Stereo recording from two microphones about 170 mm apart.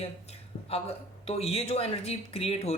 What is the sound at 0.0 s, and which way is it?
Speech, 35° left (ahead or behind).